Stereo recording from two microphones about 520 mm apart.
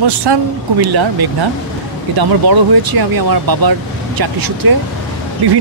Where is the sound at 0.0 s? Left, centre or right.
Right.